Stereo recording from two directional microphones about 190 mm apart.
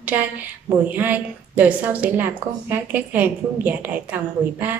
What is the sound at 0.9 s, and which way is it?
A woman's voice, 10° right (ahead or behind).